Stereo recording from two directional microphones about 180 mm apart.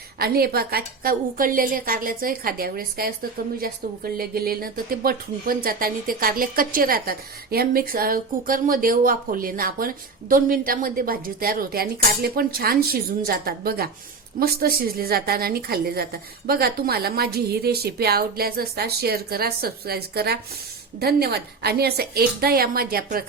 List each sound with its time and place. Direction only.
0.2 s a woman's voice: 60° right (ahead or behind)